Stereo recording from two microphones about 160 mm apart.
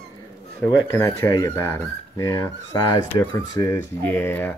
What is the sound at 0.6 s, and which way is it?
Speech, 20° left (ahead or behind).